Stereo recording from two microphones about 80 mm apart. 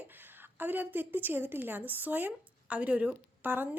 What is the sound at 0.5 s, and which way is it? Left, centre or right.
A woman's voice, right.